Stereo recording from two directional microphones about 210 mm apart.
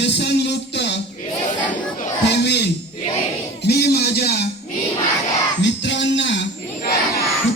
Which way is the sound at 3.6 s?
50° left (ahead or behind).